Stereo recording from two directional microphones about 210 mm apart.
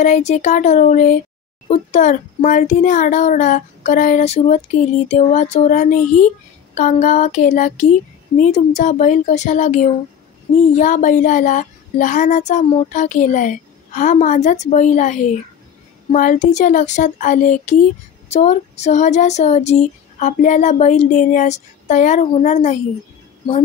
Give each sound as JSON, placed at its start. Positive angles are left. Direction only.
{"t": 0.0, "sound": "a child's voice", "side_deg": 35}